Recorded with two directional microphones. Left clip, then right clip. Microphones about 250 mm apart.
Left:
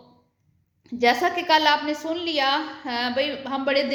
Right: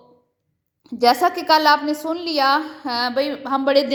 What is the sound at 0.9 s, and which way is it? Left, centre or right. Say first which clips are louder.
A woman's voice: right 4 dB; right.